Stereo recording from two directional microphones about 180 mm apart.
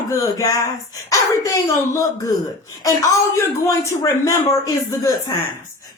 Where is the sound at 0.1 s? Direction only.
20° left (ahead or behind).